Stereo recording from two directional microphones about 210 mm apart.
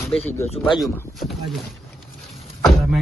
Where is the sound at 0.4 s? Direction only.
30° left (ahead or behind).